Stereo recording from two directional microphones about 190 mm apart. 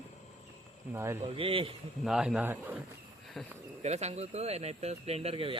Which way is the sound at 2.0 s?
5° right (ahead or behind).